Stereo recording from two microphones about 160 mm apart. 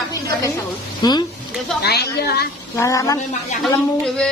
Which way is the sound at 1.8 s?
80° left.